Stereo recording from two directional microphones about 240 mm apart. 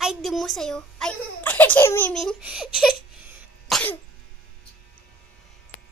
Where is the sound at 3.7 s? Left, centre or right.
Centre.